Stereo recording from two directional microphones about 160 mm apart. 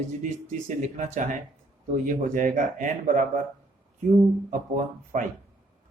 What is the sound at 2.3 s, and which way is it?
Speech, 55° right (ahead or behind).